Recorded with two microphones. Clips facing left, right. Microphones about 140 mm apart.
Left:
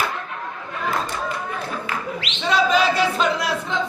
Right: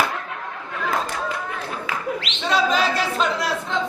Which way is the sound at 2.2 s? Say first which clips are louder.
Left 2 dB; centre (ahead or behind).